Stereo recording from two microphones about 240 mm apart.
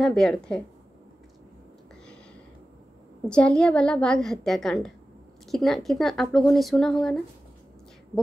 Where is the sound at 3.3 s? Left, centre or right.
Centre.